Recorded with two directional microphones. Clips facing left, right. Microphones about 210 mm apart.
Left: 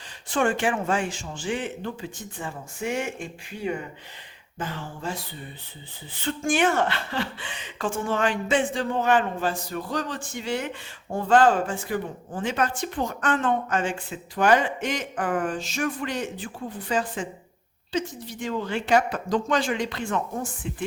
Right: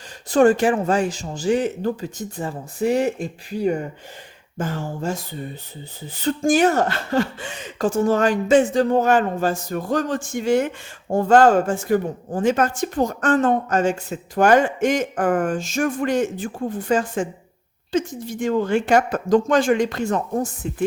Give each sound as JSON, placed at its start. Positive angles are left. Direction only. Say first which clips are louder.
{"t": 0.3, "sound": "speech", "louder": "right 8 dB", "side_deg": -40}